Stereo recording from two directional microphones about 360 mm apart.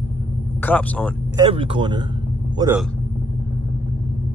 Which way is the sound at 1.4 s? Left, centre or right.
Centre.